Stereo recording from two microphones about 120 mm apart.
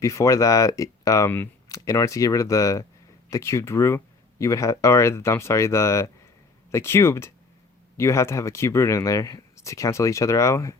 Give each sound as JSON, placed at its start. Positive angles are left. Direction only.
{"t": 0.0, "sound": "speech", "side_deg": 25}